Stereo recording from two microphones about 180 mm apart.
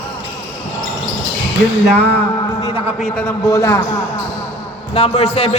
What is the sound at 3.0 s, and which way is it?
Speech, 5° left (ahead or behind).